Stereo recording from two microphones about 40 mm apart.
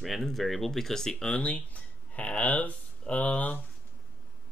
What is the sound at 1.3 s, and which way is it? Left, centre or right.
Speech, left.